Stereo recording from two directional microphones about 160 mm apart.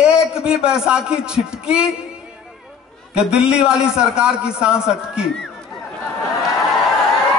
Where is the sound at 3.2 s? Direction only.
5° right (ahead or behind).